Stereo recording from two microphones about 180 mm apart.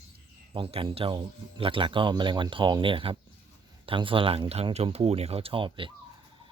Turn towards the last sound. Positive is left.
turn(degrees=-30)  # may be behind; listen again after turning